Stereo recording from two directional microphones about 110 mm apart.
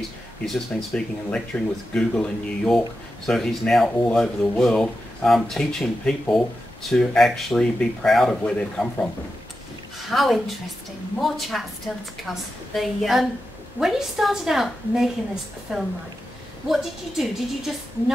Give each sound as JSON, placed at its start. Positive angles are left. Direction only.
{"t": 0.5, "sound": "speech", "side_deg": 5}
{"t": 10.0, "sound": "speech", "side_deg": 0}
{"t": 12.7, "sound": "speech", "side_deg": 0}